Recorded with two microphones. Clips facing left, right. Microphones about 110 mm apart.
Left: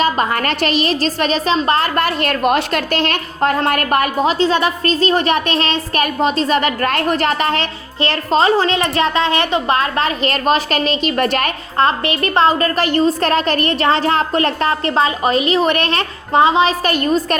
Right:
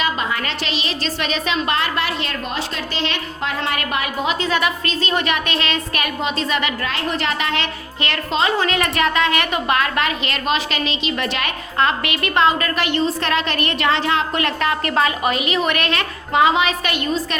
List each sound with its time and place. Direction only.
0.0 s a woman's voice: 50° left (ahead or behind)